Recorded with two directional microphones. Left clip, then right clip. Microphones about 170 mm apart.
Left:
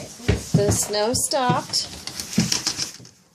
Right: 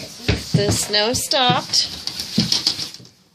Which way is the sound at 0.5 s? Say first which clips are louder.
Right 3 dB; 5° left (ahead or behind).